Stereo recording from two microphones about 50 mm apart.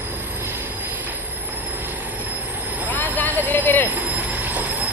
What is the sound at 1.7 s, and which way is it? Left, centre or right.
Train, right.